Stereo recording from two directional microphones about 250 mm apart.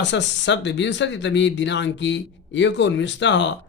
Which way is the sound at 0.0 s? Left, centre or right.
Left.